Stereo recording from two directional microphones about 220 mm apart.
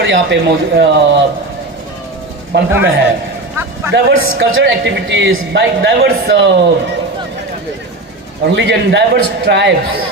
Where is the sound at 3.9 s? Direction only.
50° right (ahead or behind).